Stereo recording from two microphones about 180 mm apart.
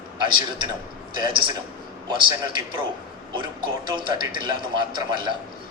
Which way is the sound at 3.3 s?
25° right (ahead or behind).